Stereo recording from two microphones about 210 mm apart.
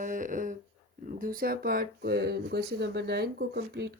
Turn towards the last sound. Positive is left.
turn(degrees=-55)  # may be behind; listen again after turning